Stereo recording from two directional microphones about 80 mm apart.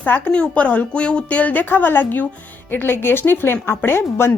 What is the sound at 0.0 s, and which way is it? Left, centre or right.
A woman's voice, centre.